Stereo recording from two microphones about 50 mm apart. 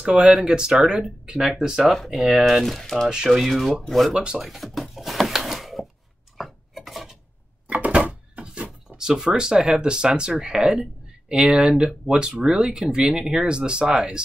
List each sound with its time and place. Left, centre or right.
0.0 s speech: centre
1.8 s speech: centre
4.1 s speech: centre
4.4 s a sound: centre
7.6 s a sound: right
8.8 s speech: centre